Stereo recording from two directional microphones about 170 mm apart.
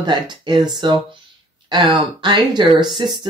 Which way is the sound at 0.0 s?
25° right (ahead or behind).